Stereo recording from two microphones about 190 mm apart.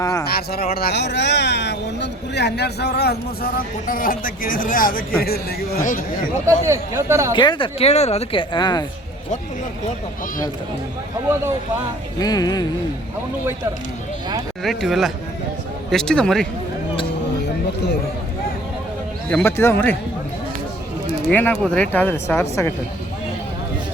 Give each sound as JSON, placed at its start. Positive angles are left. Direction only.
{"t": 0.0, "sound": "a sound", "side_deg": 20}
{"t": 0.3, "sound": "speech", "side_deg": 55}
{"t": 6.7, "sound": "speech", "side_deg": -15}
{"t": 7.3, "sound": "speech", "side_deg": 25}
{"t": 12.2, "sound": "speech", "side_deg": 20}
{"t": 14.6, "sound": "speech", "side_deg": 0}
{"t": 19.3, "sound": "speech", "side_deg": 10}
{"t": 21.2, "sound": "speech", "side_deg": 10}